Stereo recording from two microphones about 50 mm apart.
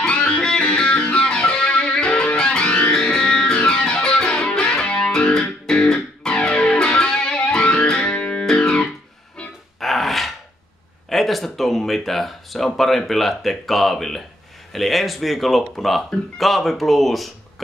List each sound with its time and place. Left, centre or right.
0.0 s music: left
9.8 s dog: centre
11.1 s speech: centre